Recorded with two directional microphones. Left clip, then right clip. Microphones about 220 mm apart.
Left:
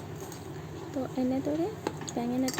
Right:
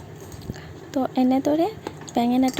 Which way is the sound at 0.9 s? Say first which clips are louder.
Right 10 dB; 45° right (ahead or behind).